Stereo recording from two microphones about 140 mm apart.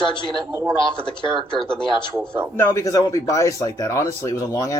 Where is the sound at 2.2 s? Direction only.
15° right (ahead or behind).